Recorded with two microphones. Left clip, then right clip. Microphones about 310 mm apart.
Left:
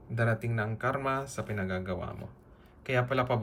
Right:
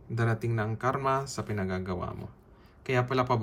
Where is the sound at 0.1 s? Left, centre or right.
Centre.